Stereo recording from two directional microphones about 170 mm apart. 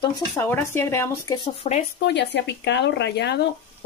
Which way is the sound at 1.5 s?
40° left (ahead or behind).